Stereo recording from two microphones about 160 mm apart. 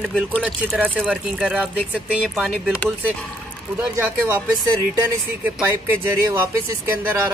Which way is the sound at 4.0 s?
15° right (ahead or behind).